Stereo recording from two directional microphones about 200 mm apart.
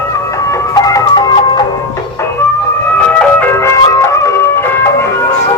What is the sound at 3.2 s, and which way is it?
Music, 10° left (ahead or behind).